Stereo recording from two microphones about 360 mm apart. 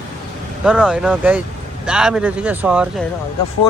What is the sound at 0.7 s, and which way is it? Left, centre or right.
Speech, centre.